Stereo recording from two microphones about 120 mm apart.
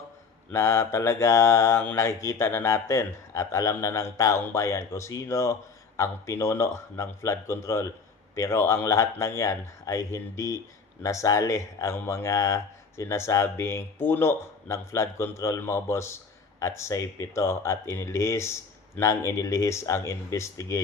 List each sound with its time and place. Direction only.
0.5 s speech: 20° left (ahead or behind)